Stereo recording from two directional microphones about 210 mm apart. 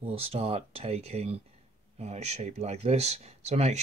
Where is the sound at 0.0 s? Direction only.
25° right (ahead or behind).